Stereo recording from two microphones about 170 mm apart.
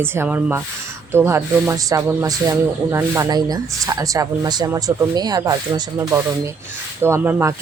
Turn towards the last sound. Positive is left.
turn(degrees=-15)  # may be behind; listen again after turning